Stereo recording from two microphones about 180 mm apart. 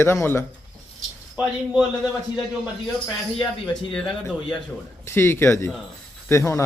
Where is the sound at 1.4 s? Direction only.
5° right (ahead or behind).